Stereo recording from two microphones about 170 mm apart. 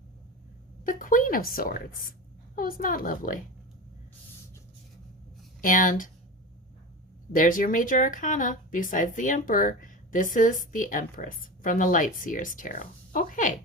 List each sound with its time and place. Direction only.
0.9 s a woman's voice: 55° left (ahead or behind)
5.6 s speech: 50° left (ahead or behind)
7.3 s speech: 55° left (ahead or behind)